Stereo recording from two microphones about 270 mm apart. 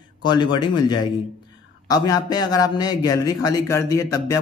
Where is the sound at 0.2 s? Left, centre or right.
Centre.